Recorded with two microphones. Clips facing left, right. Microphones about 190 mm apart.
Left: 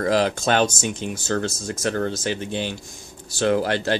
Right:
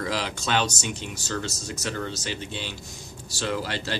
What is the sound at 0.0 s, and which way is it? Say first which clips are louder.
Speech: left 9 dB; 50° left (ahead or behind).